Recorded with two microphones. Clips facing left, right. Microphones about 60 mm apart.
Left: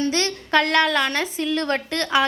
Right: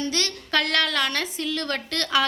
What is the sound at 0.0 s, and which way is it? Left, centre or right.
A woman's voice, left.